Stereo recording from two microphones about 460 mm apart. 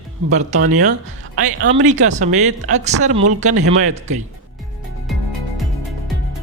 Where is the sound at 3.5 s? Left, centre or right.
Right.